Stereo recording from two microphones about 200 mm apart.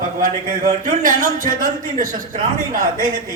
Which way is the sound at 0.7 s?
40° right (ahead or behind).